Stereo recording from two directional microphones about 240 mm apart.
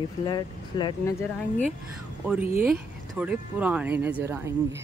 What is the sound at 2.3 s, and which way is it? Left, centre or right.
Speech, centre.